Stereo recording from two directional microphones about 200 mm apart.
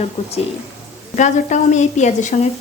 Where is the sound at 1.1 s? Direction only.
35° left (ahead or behind).